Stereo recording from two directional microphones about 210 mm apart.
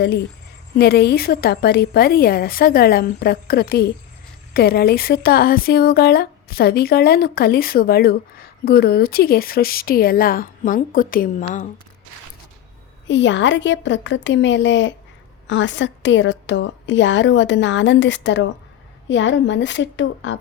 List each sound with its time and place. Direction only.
0.8 s a woman's voice: 50° left (ahead or behind)
13.1 s a woman's voice: 60° left (ahead or behind)